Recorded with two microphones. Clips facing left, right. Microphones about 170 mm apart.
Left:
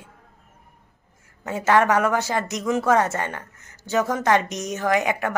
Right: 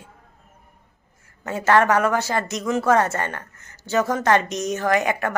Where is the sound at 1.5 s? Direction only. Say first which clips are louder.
Right 1 dB; 15° left (ahead or behind).